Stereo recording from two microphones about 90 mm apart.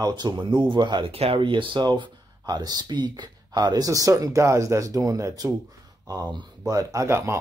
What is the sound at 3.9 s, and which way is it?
Speech, 40° right (ahead or behind).